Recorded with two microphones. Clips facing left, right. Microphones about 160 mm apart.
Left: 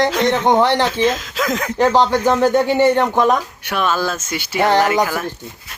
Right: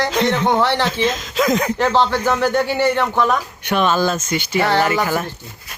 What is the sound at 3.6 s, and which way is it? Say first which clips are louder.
Speech: right 3 dB; 5° left (ahead or behind).